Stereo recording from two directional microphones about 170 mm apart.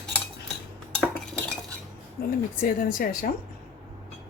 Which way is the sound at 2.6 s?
55° left (ahead or behind).